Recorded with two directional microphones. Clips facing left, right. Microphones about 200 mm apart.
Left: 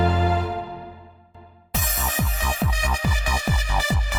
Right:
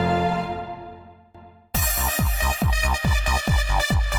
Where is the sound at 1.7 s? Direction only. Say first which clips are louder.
Even; centre (ahead or behind).